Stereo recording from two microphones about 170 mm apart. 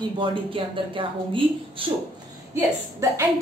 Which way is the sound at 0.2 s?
30° right (ahead or behind).